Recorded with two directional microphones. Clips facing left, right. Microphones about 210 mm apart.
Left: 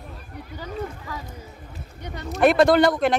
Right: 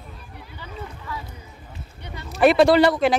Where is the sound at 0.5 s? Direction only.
40° left (ahead or behind).